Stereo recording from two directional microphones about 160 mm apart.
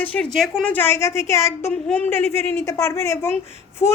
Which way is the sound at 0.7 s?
15° left (ahead or behind).